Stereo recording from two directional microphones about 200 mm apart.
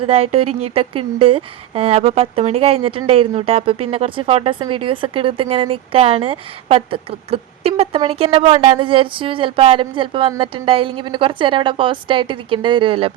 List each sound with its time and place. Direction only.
0.0 s a woman's voice: 30° right (ahead or behind)